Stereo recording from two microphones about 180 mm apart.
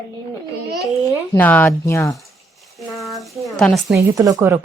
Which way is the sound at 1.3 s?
10° left (ahead or behind).